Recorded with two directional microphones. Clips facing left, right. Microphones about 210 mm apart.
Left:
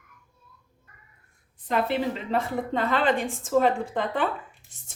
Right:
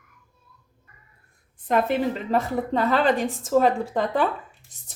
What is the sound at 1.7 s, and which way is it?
Speech, 45° right (ahead or behind).